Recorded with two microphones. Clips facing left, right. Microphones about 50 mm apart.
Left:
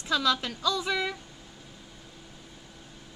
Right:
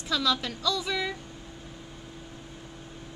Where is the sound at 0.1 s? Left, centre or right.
Left.